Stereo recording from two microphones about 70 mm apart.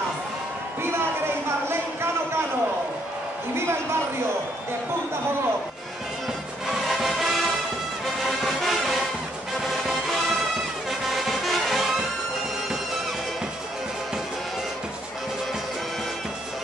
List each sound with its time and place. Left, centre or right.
0.9 s a sound: right
6.7 s music: centre
10.9 s music: centre